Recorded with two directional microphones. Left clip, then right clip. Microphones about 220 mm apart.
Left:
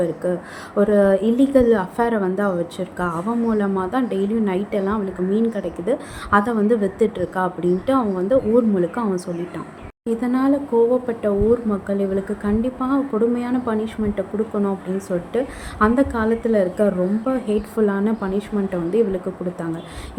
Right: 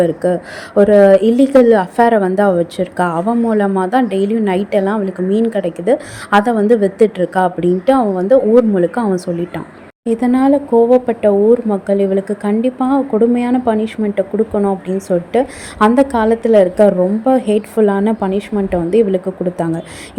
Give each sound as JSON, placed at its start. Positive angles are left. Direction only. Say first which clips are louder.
{"t": 0.0, "sound": "speech", "louder": "right 8 dB", "side_deg": -25}